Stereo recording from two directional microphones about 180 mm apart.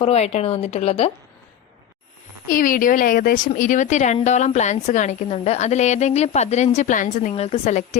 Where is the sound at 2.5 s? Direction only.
50° left (ahead or behind).